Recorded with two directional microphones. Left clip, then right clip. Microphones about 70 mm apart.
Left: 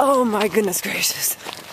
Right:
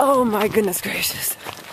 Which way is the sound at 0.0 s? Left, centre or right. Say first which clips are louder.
Even; centre.